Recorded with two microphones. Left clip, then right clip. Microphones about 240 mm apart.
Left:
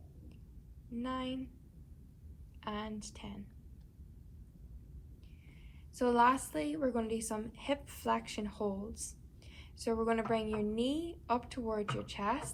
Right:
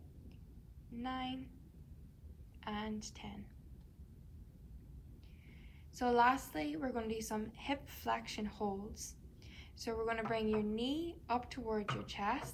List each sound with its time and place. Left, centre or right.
0.9 s a woman's voice: centre
2.6 s a woman's voice: centre
6.0 s a woman's voice: centre
9.8 s a woman's voice: centre